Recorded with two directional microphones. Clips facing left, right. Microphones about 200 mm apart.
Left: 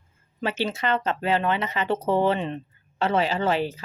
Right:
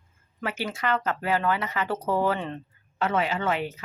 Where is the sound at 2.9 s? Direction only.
30° left (ahead or behind).